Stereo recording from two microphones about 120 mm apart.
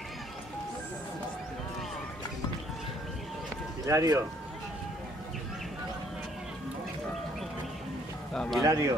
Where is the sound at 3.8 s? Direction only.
30° right (ahead or behind).